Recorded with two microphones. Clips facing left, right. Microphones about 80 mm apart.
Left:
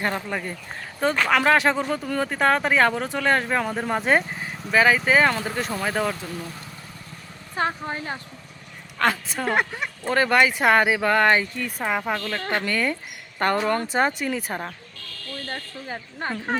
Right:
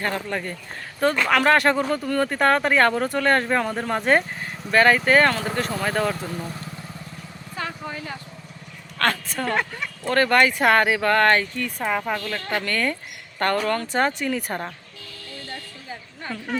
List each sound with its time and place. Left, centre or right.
0.3 s speech: centre
7.5 s speech: left
9.0 s speech: centre
9.5 s speech: centre
14.2 s speech: centre
15.4 s a sound: left